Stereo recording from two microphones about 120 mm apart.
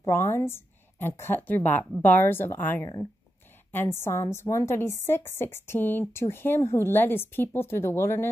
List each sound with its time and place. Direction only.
0.1 s a woman's voice: 20° left (ahead or behind)